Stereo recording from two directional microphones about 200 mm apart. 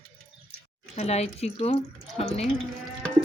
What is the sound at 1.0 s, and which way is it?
Speech, 30° left (ahead or behind).